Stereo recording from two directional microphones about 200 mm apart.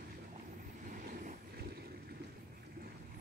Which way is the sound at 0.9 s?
45° right (ahead or behind).